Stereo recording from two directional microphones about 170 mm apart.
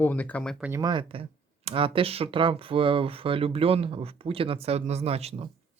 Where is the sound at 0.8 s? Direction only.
25° right (ahead or behind).